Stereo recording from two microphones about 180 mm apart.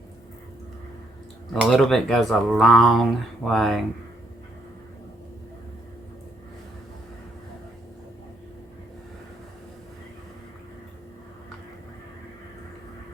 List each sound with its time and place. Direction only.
1.5 s speech: centre (ahead or behind)